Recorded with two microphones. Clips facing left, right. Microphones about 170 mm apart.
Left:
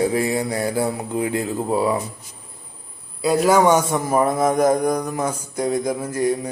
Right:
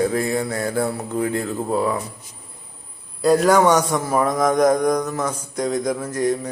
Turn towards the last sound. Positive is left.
turn(degrees=10)  # may be behind; listen again after turning